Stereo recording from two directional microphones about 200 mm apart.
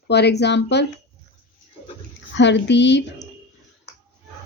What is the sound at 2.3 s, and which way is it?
Speech, 60° left (ahead or behind).